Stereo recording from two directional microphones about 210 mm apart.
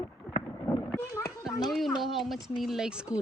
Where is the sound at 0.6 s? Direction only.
15° left (ahead or behind).